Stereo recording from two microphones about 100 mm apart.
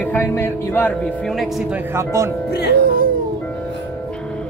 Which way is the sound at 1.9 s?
25° right (ahead or behind).